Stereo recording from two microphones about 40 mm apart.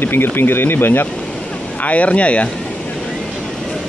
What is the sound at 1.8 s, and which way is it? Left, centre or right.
Speech, left.